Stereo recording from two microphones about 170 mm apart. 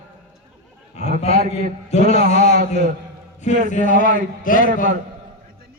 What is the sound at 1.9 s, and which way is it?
A man's voice, 40° left (ahead or behind).